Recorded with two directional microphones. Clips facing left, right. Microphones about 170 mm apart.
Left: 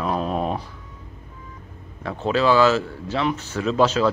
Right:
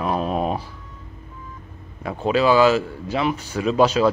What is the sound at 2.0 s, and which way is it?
Speech, 10° right (ahead or behind).